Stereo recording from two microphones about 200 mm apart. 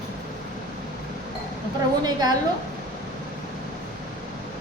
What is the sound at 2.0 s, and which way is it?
Speech, 20° right (ahead or behind).